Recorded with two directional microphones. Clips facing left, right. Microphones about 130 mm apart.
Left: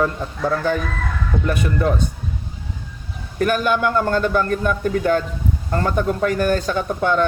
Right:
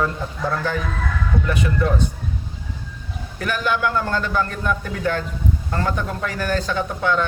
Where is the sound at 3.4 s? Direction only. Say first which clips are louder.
Left 4 dB; 50° left (ahead or behind).